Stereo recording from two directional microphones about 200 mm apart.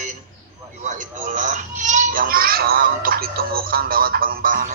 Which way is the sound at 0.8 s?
40° right (ahead or behind).